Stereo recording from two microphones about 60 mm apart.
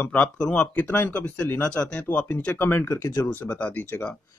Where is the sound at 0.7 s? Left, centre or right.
Left.